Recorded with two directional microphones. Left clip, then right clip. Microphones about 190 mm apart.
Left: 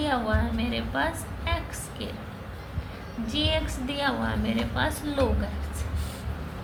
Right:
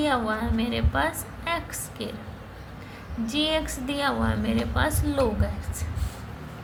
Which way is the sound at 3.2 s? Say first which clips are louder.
Right 2 dB; 40° right (ahead or behind).